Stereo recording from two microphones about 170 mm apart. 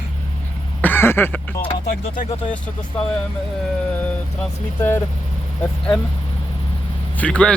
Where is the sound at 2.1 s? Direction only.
50° left (ahead or behind).